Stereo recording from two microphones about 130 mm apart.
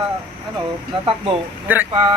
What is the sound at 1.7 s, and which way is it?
Speech, 15° right (ahead or behind).